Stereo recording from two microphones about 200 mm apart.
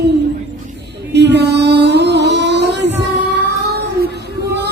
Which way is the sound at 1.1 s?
60° right (ahead or behind).